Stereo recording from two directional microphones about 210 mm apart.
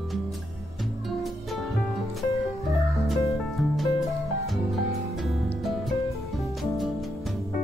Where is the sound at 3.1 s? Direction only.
Centre (ahead or behind).